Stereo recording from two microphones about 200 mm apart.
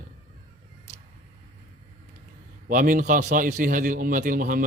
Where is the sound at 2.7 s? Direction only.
40° right (ahead or behind).